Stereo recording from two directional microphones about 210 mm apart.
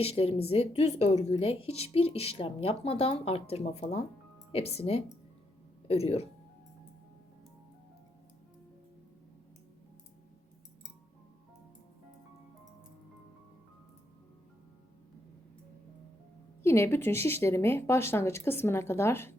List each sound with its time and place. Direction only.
0.0 s speech: 30° left (ahead or behind)
16.6 s speech: 10° left (ahead or behind)